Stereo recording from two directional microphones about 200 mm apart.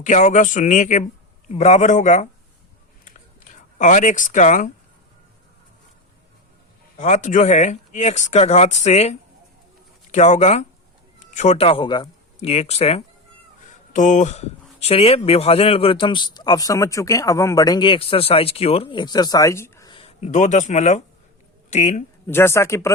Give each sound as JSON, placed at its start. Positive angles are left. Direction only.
{"t": 0.0, "sound": "speech", "side_deg": 40}
{"t": 3.8, "sound": "speech", "side_deg": 40}
{"t": 6.9, "sound": "speech", "side_deg": 40}
{"t": 19.9, "sound": "speech", "side_deg": 30}
{"t": 22.3, "sound": "speech", "side_deg": 10}